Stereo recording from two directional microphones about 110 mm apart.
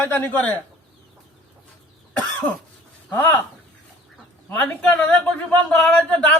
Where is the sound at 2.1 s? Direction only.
15° left (ahead or behind).